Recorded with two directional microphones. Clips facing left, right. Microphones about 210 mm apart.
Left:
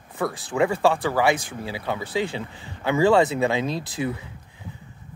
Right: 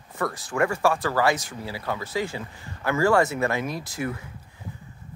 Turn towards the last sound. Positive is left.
turn(degrees=20)  # may be behind; listen again after turning